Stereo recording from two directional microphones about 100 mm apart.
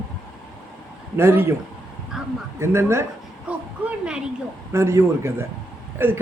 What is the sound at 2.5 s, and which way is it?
Speech, 25° right (ahead or behind).